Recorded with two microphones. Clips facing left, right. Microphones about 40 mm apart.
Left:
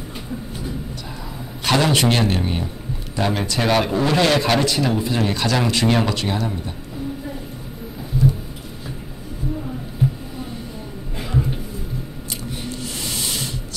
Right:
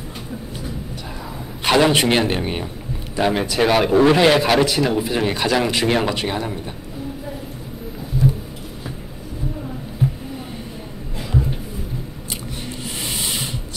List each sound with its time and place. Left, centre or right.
1.6 s speech: centre
12.6 s rub: centre